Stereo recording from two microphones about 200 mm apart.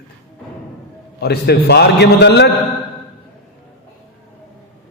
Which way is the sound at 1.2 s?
55° left (ahead or behind).